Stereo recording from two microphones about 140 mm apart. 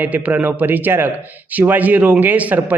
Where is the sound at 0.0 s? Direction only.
10° right (ahead or behind).